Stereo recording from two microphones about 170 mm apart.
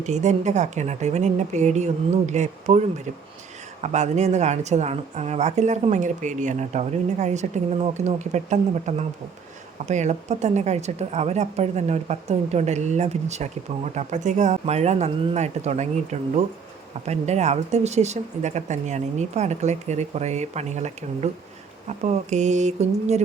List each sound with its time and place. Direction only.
0.0 s speech: 45° right (ahead or behind)
3.8 s speech: 45° right (ahead or behind)
17.1 s speech: 40° right (ahead or behind)